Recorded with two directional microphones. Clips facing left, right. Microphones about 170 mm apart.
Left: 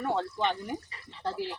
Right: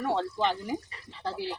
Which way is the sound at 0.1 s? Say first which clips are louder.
Right 1 dB; centre (ahead or behind).